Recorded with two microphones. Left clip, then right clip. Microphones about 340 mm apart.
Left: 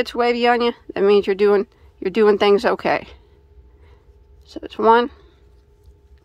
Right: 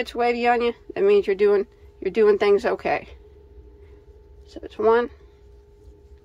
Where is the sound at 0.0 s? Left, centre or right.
Centre.